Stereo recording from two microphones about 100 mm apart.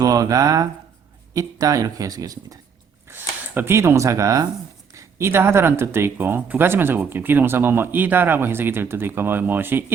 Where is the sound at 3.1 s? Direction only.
25° right (ahead or behind).